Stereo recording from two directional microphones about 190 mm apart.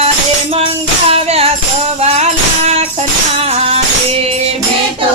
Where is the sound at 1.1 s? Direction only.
30° right (ahead or behind).